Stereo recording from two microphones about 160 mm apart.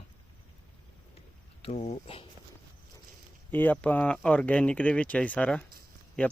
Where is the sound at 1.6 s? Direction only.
40° left (ahead or behind).